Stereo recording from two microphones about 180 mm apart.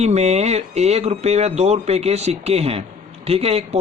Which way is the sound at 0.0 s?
35° right (ahead or behind).